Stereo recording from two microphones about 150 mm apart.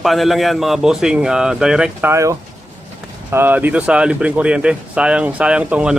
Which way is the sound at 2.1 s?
20° right (ahead or behind).